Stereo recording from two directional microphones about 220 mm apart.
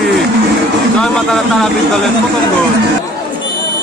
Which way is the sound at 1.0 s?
5° left (ahead or behind).